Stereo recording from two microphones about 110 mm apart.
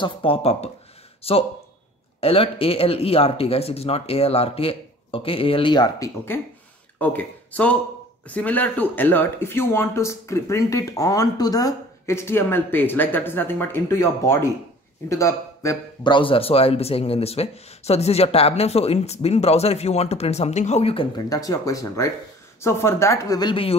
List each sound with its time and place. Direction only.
0.0 s speech: 55° left (ahead or behind)
5.9 s speech: 25° left (ahead or behind)
7.0 s speech: 15° left (ahead or behind)
16.0 s speech: 45° left (ahead or behind); by 20.9 s 90° left
21.3 s speech: 30° left (ahead or behind)
23.5 s speech: 55° left (ahead or behind)